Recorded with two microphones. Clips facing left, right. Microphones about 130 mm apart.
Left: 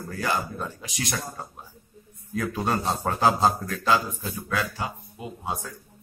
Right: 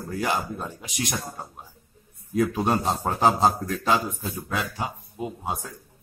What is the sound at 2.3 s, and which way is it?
A man's voice, 15° right (ahead or behind).